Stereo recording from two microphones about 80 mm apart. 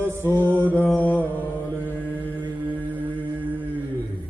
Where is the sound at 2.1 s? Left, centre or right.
Left.